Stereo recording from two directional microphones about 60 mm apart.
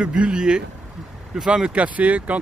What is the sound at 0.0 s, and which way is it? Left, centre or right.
Speech, centre.